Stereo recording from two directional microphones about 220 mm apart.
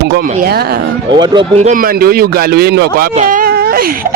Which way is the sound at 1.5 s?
35° right (ahead or behind).